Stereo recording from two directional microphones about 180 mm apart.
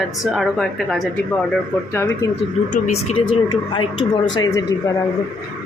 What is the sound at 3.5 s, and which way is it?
Speech, 30° left (ahead or behind).